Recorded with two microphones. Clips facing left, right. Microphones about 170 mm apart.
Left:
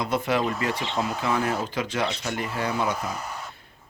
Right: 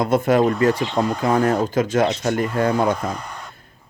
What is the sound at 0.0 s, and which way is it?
Speech, 45° right (ahead or behind).